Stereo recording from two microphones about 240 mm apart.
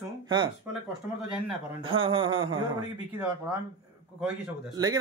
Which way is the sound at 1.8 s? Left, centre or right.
Right.